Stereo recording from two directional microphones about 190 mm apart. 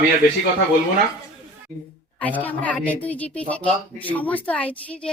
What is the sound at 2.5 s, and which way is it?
A woman's voice, 10° left (ahead or behind).